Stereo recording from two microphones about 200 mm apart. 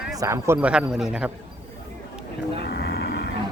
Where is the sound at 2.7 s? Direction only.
55° left (ahead or behind).